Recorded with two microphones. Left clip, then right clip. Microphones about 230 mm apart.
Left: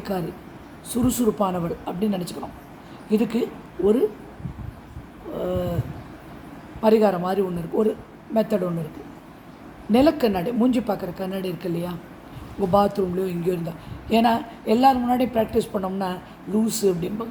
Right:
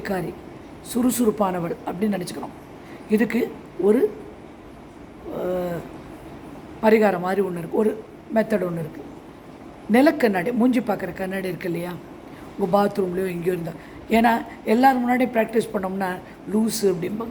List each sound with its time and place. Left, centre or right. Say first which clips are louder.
0.0 s a woman's voice: right 1 dB; centre
5.4 s a sound: right 1 dB; centre
6.8 s a woman's voice: right 1 dB; centre
9.9 s a woman's voice: right 1 dB; centre